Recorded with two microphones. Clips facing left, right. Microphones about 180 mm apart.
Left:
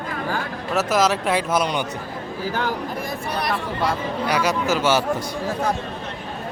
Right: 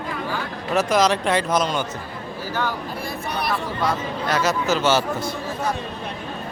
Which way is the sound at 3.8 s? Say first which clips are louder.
Left 2 dB; 10° left (ahead or behind).